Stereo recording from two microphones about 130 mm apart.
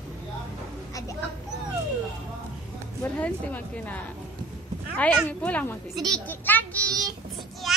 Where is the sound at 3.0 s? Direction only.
15° left (ahead or behind).